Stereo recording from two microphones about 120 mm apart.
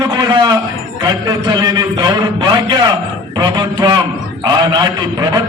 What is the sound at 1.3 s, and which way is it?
A man's voice, 35° right (ahead or behind).